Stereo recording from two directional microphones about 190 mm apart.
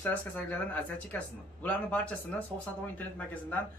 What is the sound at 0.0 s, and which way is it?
Speech, 10° left (ahead or behind).